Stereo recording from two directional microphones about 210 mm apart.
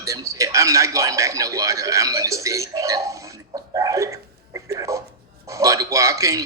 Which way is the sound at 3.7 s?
15° right (ahead or behind).